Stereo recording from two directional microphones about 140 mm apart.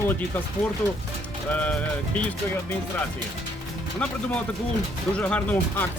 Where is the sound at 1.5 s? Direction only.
10° left (ahead or behind).